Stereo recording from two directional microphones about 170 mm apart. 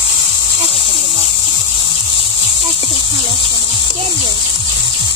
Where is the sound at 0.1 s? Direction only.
35° left (ahead or behind).